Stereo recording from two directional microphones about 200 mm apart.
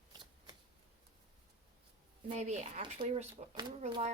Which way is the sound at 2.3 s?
35° right (ahead or behind).